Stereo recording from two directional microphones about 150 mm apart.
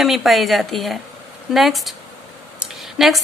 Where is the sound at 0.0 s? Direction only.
Centre (ahead or behind).